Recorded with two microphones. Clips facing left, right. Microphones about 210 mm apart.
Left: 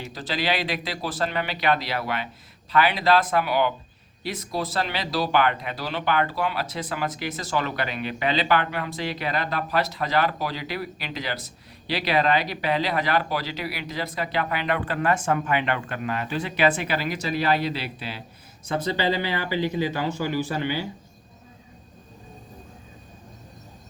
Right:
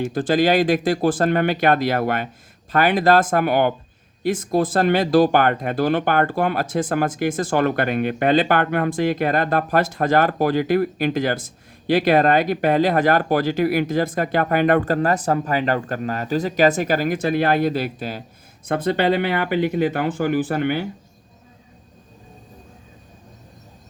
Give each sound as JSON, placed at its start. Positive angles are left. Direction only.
{"t": 0.0, "sound": "speech", "side_deg": -50}